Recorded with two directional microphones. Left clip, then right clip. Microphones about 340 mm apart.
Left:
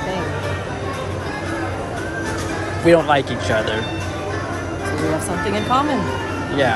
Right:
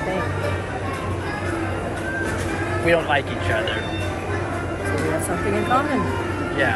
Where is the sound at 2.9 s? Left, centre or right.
Centre.